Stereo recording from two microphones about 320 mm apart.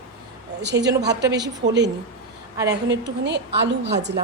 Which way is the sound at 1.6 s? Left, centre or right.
Right.